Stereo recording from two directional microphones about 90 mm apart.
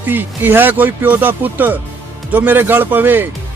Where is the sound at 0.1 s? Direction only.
20° right (ahead or behind).